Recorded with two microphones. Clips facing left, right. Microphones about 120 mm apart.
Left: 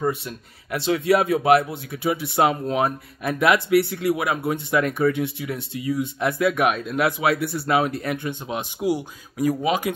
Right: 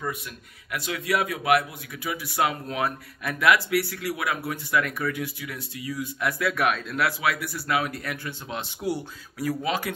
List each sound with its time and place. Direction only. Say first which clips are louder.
0.7 s a man's voice: left 8 dB; 30° left (ahead or behind)